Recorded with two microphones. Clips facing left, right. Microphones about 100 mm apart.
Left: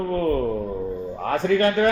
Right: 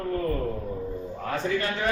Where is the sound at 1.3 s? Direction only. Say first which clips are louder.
Left 8 dB; 55° left (ahead or behind).